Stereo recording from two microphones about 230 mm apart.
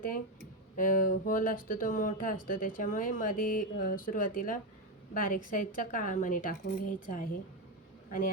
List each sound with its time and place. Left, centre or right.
0.8 s speech: left